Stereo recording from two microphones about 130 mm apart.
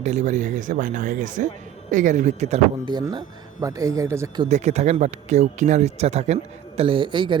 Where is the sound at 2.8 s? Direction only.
35° right (ahead or behind).